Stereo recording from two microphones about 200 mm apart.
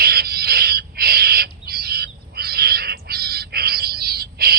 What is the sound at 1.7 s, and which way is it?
Bird, 50° right (ahead or behind).